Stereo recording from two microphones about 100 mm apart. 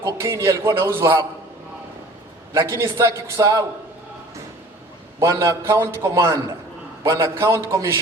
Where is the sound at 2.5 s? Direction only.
30° right (ahead or behind).